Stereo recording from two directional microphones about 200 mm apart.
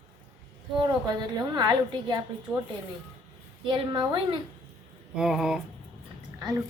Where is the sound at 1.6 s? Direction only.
20° right (ahead or behind).